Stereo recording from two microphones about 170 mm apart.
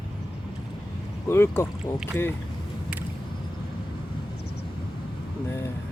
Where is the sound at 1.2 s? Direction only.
15° left (ahead or behind).